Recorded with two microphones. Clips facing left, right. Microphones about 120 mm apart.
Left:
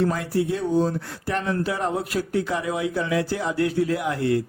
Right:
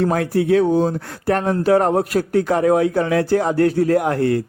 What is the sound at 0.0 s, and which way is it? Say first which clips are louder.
Speech: right 5 dB; 55° right (ahead or behind).